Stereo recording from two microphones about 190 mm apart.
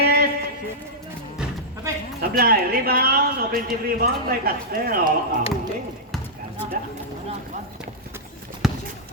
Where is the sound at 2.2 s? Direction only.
50° right (ahead or behind).